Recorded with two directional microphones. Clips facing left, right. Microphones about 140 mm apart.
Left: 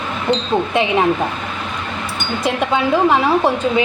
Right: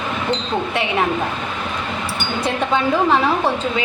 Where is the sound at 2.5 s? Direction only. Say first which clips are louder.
Left 2 dB; 15° left (ahead or behind).